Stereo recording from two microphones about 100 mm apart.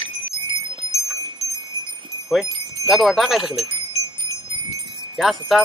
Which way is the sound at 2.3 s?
Centre (ahead or behind).